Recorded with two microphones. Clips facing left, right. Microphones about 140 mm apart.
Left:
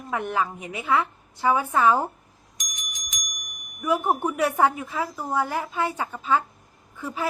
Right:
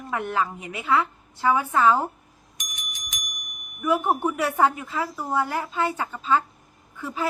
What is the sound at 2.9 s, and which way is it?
Bicycle bell, 55° right (ahead or behind).